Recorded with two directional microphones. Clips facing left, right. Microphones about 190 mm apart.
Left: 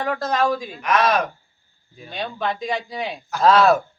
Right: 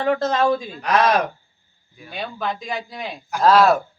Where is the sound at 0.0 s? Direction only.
25° right (ahead or behind).